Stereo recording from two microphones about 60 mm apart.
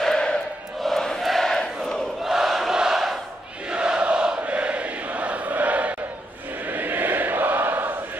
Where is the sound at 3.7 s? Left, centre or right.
Centre.